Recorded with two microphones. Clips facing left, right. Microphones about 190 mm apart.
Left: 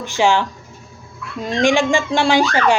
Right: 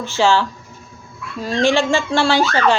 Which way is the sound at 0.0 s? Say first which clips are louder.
Even; 15° left (ahead or behind).